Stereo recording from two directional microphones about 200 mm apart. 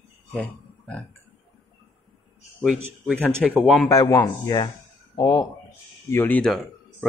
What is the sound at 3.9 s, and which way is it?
Speech, 15° left (ahead or behind).